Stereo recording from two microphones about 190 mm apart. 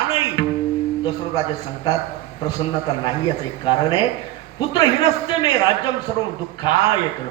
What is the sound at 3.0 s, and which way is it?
A man's voice, 20° left (ahead or behind).